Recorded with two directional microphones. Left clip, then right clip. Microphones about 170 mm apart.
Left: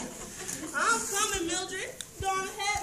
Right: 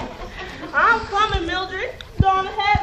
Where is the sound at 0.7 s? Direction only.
25° left (ahead or behind).